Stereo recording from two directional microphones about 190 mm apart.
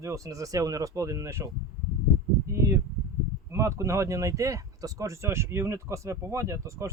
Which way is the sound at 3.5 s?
15° right (ahead or behind).